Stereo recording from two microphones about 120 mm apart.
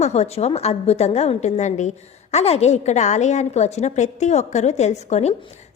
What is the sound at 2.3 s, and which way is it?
A woman's voice, 65° left (ahead or behind).